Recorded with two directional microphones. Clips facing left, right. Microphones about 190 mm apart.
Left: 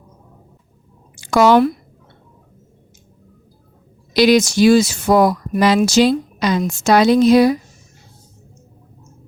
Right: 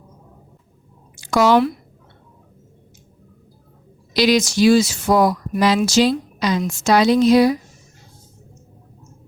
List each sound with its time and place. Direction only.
1.2 s speech: 55° left (ahead or behind)
4.1 s speech: 55° left (ahead or behind)